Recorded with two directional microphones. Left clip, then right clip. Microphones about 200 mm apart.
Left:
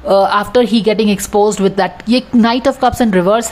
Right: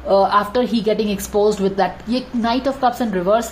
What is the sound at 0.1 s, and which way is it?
A woman's voice, 30° left (ahead or behind).